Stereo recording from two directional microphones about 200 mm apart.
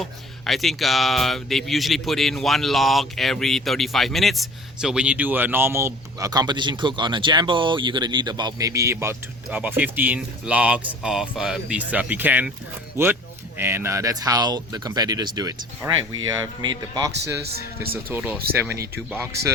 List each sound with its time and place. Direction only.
0.0 s speech: centre (ahead or behind)
13.6 s speech: 10° right (ahead or behind)
17.9 s speech: 10° right (ahead or behind)